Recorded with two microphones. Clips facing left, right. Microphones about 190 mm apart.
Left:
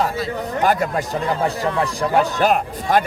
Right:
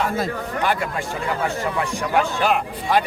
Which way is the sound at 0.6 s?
40° left (ahead or behind).